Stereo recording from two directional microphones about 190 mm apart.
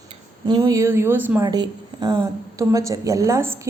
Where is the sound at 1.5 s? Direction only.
20° right (ahead or behind).